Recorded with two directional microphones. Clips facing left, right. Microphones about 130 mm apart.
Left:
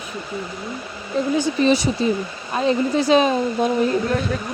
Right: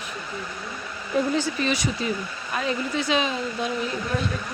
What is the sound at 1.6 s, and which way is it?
Speech, 30° left (ahead or behind).